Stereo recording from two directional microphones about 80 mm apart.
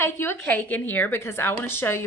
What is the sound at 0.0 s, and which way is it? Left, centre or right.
A woman's voice, left.